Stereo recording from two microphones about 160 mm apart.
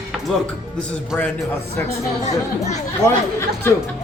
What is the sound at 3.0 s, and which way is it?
Speech, 15° left (ahead or behind).